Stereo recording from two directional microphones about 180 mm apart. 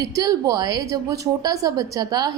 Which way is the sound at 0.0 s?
20° right (ahead or behind).